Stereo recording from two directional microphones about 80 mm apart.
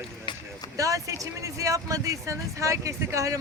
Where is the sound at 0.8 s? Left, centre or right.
Right.